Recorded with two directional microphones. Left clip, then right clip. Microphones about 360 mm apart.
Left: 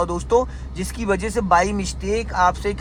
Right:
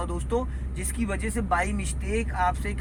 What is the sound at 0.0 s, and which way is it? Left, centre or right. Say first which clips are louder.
Speech: left 11 dB; centre.